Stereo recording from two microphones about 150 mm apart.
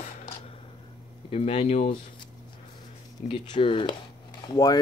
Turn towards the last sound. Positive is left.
turn(degrees=25)  # may be behind; listen again after turning